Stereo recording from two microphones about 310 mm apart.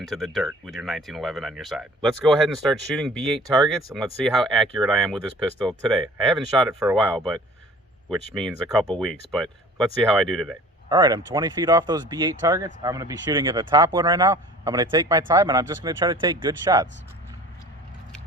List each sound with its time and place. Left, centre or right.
0.0 s speech: centre
10.8 s speech: centre